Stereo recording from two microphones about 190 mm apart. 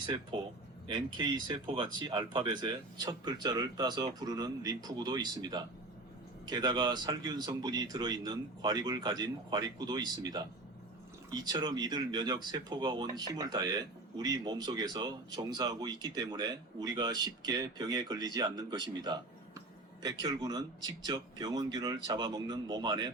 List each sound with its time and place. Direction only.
0.0 s speech: 25° right (ahead or behind)
20.2 s speech: 20° right (ahead or behind)